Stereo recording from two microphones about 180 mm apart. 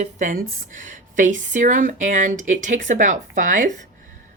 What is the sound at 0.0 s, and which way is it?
Speech, 45° right (ahead or behind).